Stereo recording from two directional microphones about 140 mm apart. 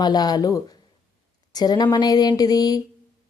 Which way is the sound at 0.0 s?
30° left (ahead or behind).